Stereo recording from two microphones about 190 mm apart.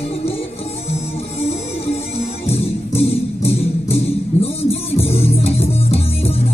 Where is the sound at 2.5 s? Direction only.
30° left (ahead or behind).